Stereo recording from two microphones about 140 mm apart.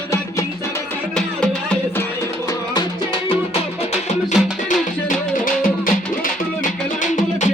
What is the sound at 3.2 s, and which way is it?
Music, 40° left (ahead or behind).